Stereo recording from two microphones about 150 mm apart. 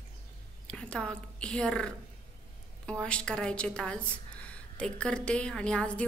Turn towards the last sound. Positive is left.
turn(degrees=5)  # may be behind; listen again after turning